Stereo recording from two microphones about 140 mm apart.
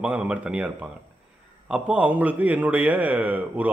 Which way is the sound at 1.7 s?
10° right (ahead or behind).